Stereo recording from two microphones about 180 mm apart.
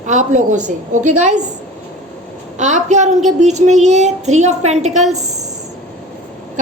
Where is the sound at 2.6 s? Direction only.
40° right (ahead or behind).